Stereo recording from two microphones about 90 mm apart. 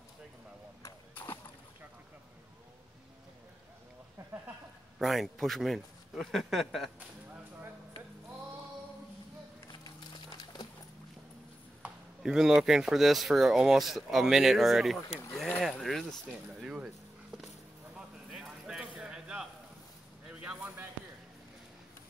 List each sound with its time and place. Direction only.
1.1 s splash: 25° left (ahead or behind)
4.2 s a sound: 35° right (ahead or behind)
4.9 s speech: centre (ahead or behind)
9.7 s music: 50° left (ahead or behind)
12.2 s speech: 5° right (ahead or behind)
16.6 s speech: 15° right (ahead or behind)
17.9 s a sound: 5° right (ahead or behind)
20.2 s speech: 10° right (ahead or behind)